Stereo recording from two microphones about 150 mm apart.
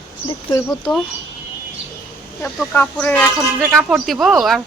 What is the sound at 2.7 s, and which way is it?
A woman's voice, 10° left (ahead or behind).